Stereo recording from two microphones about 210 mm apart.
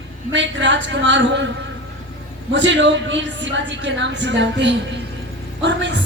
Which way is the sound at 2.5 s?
60° right (ahead or behind).